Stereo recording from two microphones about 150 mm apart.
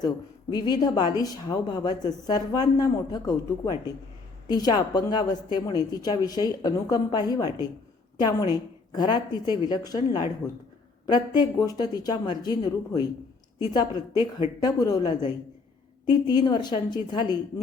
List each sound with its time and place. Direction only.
0.5 s a woman's voice: 30° left (ahead or behind)